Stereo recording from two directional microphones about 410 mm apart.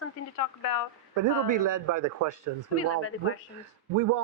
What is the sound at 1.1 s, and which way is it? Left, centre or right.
A man's voice, right.